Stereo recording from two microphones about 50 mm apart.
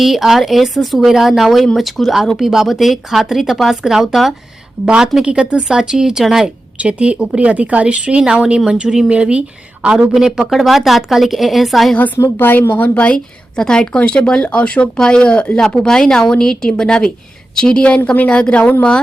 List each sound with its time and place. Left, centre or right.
0.0 s a woman's voice: centre
4.9 s speech: centre
6.4 s a woman's voice: right
10.2 s a woman's voice: centre
12.4 s a woman's voice: left
13.6 s a woman's voice: centre
14.9 s a woman's voice: centre